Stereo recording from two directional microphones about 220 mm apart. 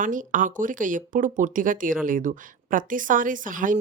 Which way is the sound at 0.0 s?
35° right (ahead or behind).